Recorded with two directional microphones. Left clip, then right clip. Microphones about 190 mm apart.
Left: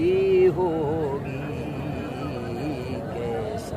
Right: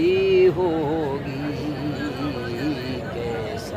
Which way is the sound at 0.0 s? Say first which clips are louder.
Right 2 dB; 20° right (ahead or behind).